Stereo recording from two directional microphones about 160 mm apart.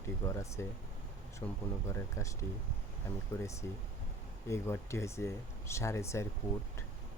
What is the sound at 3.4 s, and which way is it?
Speech, 20° left (ahead or behind).